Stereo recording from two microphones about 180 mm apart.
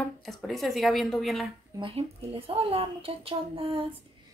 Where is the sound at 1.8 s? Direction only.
30° right (ahead or behind).